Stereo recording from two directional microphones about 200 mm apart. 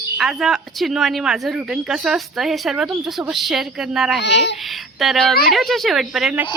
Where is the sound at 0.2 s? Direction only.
Centre (ahead or behind).